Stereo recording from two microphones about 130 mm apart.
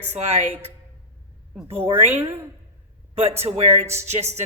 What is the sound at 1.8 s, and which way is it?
Speech, 50° right (ahead or behind).